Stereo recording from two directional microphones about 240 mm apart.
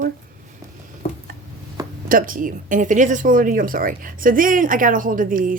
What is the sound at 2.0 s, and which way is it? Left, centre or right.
Speech, right.